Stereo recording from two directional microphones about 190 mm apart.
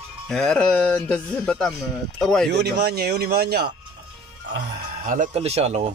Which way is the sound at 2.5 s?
60° right (ahead or behind).